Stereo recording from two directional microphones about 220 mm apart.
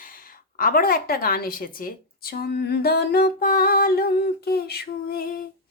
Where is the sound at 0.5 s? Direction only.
40° left (ahead or behind).